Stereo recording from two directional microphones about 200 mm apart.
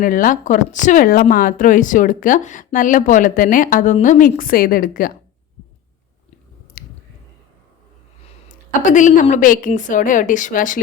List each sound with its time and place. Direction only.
0.0 s speech: 45° left (ahead or behind)
6.8 s a sound: 45° left (ahead or behind)
8.9 s speech: 40° left (ahead or behind)